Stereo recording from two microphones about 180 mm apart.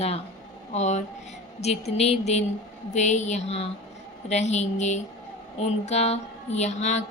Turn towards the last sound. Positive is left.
turn(degrees=40)  # may be behind; listen again after turning